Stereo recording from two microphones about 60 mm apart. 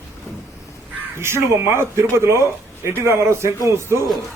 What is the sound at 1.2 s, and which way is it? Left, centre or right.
Speech, right.